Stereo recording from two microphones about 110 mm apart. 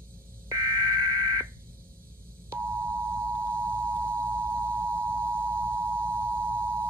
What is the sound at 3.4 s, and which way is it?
Singing bowl, 20° right (ahead or behind).